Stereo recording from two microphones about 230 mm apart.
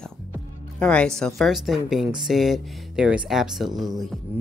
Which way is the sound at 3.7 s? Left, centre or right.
Centre.